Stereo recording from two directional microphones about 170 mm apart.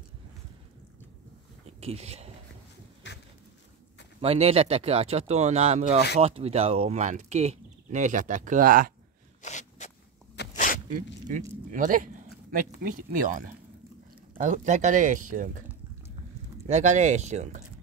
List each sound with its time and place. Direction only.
1.8 s speech: 35° right (ahead or behind)
3.0 s a sound: 90° left
4.2 s speech: 35° right (ahead or behind); by 8.9 s 55° right (ahead or behind)
9.4 s zipper: 45° left (ahead or behind)
11.2 s speech: 50° right (ahead or behind)
14.4 s speech: 45° right (ahead or behind)
16.6 s speech: 45° right (ahead or behind)